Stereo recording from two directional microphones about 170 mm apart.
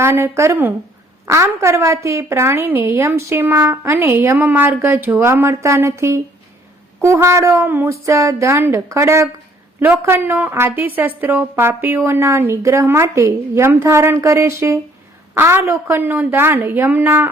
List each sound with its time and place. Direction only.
0.0 s a woman's voice: 15° right (ahead or behind)